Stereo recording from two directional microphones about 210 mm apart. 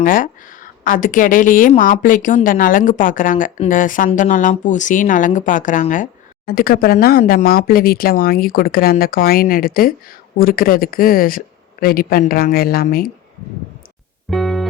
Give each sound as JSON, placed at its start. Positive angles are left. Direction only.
{"t": 0.0, "sound": "a woman's voice", "side_deg": 40}
{"t": 14.3, "sound": "music", "side_deg": 0}